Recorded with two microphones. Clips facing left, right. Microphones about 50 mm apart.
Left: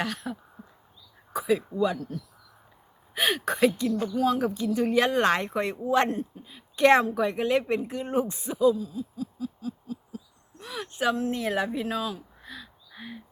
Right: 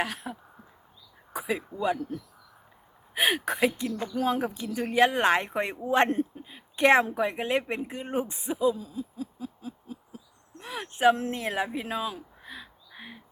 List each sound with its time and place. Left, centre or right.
0.0 s speech: centre
3.2 s speech: centre
4.1 s speech: right
8.7 s hoot: right
10.6 s speech: right
12.9 s bird: centre